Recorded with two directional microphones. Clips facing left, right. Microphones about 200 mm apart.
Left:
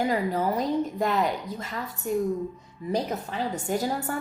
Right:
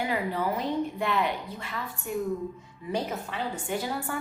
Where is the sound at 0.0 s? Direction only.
40° left (ahead or behind).